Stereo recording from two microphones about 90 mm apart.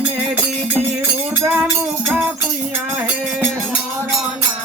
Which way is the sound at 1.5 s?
15° right (ahead or behind).